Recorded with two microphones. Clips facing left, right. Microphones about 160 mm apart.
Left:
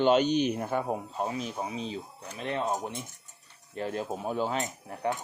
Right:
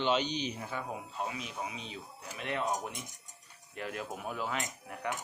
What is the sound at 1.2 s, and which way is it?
Speech, 35° left (ahead or behind).